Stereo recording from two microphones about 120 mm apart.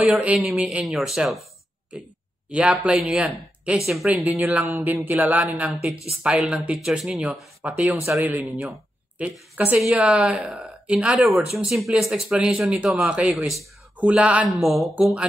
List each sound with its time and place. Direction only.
0.4 s speech: centre (ahead or behind)
2.5 s speech: 10° right (ahead or behind)
4.1 s speech: 15° right (ahead or behind)
8.5 s speech: centre (ahead or behind)
13.9 s speech: 10° right (ahead or behind)
14.5 s speech: centre (ahead or behind)